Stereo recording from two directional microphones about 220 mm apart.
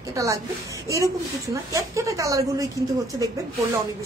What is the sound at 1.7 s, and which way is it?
Speech, 15° right (ahead or behind).